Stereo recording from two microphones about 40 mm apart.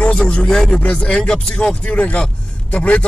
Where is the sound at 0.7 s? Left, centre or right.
Left.